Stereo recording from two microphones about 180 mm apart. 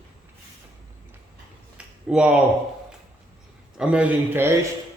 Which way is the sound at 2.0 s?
5° right (ahead or behind).